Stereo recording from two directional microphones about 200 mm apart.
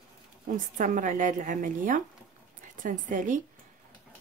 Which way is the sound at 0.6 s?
40° right (ahead or behind).